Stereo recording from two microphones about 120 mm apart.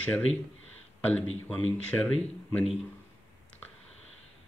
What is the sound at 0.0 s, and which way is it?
Speech, 10° left (ahead or behind).